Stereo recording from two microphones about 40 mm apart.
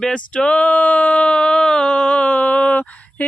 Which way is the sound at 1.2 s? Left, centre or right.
Centre.